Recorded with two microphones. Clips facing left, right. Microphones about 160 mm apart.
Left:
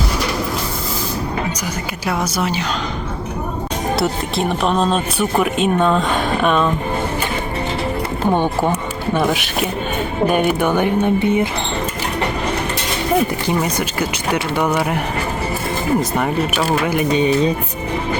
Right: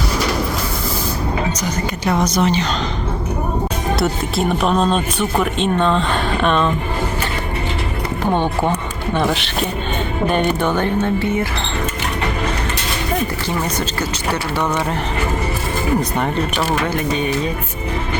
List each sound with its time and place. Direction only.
1.6 s speech: 5° left (ahead or behind)
3.9 s speech: centre (ahead or behind)
8.3 s speech: 10° left (ahead or behind)
13.5 s speech: 15° left (ahead or behind)
16.8 s speech: 15° left (ahead or behind)